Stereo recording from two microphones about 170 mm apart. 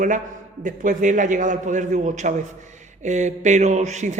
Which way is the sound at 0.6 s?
50° right (ahead or behind).